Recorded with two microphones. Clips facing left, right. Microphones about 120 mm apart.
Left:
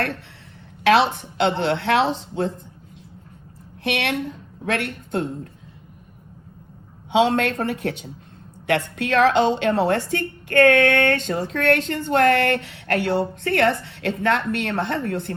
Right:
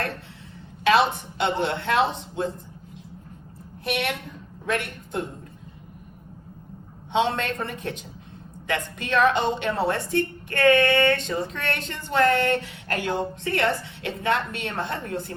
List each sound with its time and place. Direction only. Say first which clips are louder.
1.4 s a woman's voice: left 4 dB; 70° left (ahead or behind)
3.8 s a woman's voice: left 4 dB; 85° left; by 5.5 s 70° left (ahead or behind)
7.3 s a woman's voice: left 7 dB; 70° left (ahead or behind)